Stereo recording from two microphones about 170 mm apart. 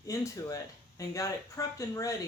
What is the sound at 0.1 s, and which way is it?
Speech, 20° left (ahead or behind).